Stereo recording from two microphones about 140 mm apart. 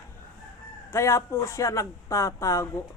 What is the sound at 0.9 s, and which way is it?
Speech, 20° left (ahead or behind).